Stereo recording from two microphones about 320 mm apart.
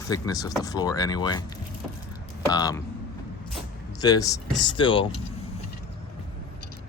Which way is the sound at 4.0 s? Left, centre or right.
Centre.